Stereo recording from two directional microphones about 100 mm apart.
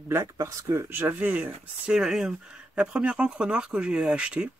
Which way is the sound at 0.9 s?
15° right (ahead or behind).